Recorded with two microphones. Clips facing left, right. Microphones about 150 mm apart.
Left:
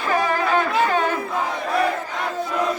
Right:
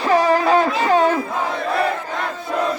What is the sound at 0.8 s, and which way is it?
Crowd, 35° right (ahead or behind).